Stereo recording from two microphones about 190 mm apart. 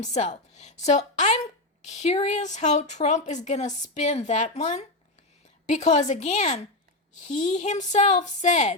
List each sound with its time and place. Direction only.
0.0 s a woman's voice: 40° left (ahead or behind)